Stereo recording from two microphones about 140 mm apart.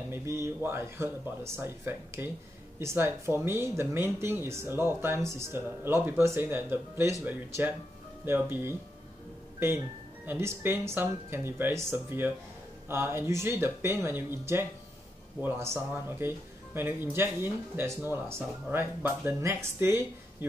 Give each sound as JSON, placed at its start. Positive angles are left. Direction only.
{"t": 0.1, "sound": "speech", "side_deg": -15}
{"t": 10.2, "sound": "speech", "side_deg": -15}